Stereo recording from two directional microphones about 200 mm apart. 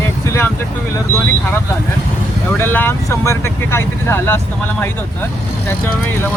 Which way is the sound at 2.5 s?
10° left (ahead or behind).